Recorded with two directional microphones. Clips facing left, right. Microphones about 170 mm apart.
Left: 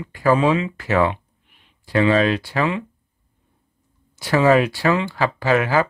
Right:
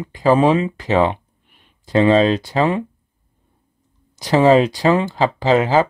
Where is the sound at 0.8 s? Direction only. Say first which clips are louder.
Right 2 dB; 20° right (ahead or behind).